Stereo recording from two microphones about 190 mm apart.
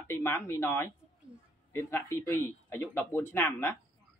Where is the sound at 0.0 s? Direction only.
10° left (ahead or behind).